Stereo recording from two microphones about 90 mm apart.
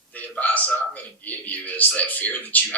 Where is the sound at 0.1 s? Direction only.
20° left (ahead or behind).